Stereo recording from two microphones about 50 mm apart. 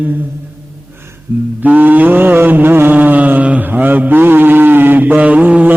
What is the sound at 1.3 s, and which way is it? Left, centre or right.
Humming, right.